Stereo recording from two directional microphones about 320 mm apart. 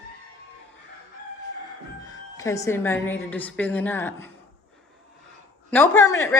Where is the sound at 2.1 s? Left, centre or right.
Centre.